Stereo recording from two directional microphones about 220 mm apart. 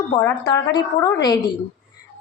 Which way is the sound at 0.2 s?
15° left (ahead or behind).